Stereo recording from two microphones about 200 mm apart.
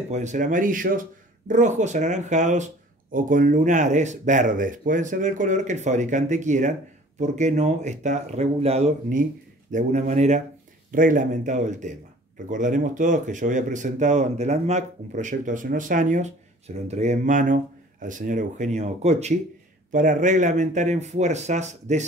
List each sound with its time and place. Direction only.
0.1 s speech: 35° right (ahead or behind)